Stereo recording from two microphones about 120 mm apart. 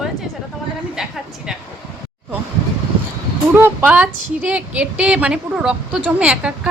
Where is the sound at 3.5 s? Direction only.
15° right (ahead or behind).